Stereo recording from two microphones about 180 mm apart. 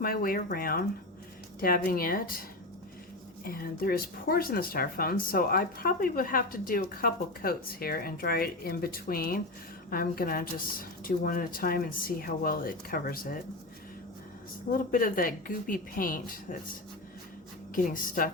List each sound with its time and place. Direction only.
0.0 s speech: 55° left (ahead or behind)
3.4 s speech: 55° left (ahead or behind)
14.7 s speech: 50° left (ahead or behind)
17.8 s speech: 50° left (ahead or behind)